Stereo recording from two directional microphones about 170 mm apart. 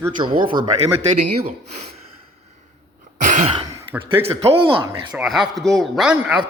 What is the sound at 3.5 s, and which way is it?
Throat clearing, 15° right (ahead or behind).